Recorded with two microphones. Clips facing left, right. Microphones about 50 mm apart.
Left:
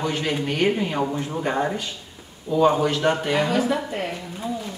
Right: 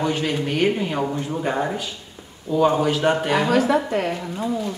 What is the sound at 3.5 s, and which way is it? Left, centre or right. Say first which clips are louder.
Speech: right 4 dB; right.